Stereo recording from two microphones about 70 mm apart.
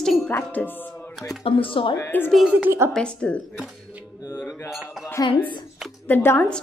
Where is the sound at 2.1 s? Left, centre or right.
Left.